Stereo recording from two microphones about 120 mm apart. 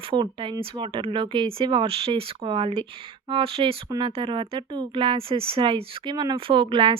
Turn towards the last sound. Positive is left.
turn(degrees=-50)  # may be behind; listen again after turning